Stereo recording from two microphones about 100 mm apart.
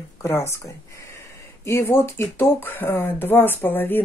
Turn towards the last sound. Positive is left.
turn(degrees=20)  # may be behind; listen again after turning